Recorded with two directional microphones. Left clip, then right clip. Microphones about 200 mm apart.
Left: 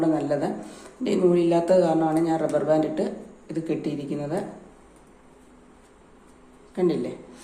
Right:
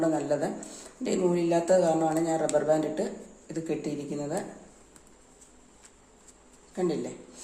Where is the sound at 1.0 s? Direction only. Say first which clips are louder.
Left 6 dB; 15° right (ahead or behind).